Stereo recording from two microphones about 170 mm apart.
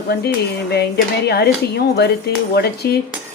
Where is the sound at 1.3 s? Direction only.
75° left (ahead or behind).